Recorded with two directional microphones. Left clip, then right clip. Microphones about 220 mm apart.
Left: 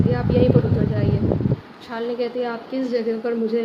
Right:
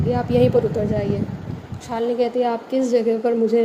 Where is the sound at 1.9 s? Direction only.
20° right (ahead or behind).